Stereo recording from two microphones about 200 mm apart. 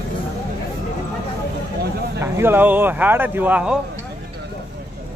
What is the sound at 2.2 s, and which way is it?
Speech, 10° right (ahead or behind).